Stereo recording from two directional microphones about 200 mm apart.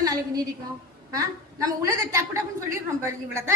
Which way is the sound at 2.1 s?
15° right (ahead or behind).